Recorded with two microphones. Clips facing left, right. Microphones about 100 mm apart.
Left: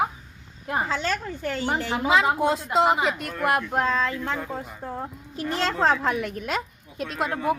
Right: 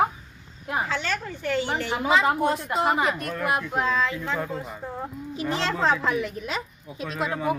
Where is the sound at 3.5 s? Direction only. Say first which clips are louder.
Left 3 dB; 50° left (ahead or behind).